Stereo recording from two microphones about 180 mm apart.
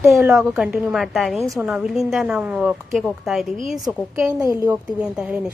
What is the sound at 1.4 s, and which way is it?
Speech, 15° right (ahead or behind).